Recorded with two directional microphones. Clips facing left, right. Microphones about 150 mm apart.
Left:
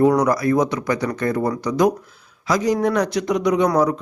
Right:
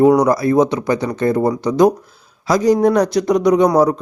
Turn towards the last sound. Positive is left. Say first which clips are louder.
# right 5 dB
turn(degrees=-35)  # may be behind; listen again after turning